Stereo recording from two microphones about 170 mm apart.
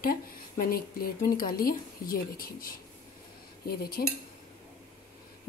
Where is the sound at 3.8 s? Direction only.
65° left (ahead or behind).